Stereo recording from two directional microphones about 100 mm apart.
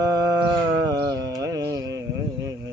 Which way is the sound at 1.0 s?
40° right (ahead or behind).